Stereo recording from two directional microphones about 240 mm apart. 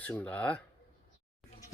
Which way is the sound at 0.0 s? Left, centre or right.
Centre.